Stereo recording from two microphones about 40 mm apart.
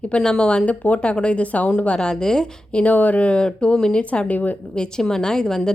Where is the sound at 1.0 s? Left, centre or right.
Left.